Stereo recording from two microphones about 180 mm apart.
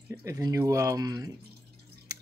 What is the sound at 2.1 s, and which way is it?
Drip, 20° right (ahead or behind).